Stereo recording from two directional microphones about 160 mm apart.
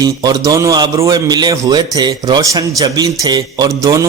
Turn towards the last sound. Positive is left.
turn(degrees=-20)  # may be behind; listen again after turning